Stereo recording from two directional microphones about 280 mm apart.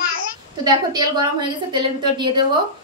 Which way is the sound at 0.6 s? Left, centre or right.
Centre.